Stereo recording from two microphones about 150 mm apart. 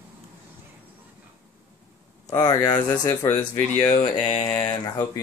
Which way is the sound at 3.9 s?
35° left (ahead or behind).